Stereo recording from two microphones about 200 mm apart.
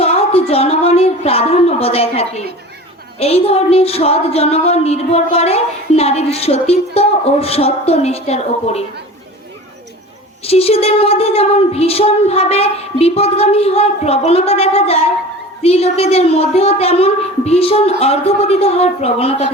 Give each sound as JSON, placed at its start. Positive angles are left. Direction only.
{"t": 0.0, "sound": "a sound", "side_deg": 30}
{"t": 3.2, "sound": "speech", "side_deg": 30}
{"t": 10.4, "sound": "a woman's voice", "side_deg": 30}